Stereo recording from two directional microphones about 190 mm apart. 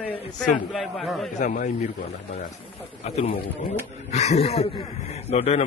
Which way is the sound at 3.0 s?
35° left (ahead or behind).